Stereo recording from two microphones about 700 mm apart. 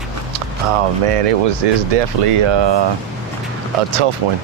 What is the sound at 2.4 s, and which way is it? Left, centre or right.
Speech, right.